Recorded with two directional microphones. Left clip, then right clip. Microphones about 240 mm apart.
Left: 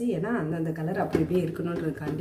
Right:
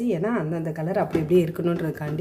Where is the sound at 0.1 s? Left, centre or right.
Right.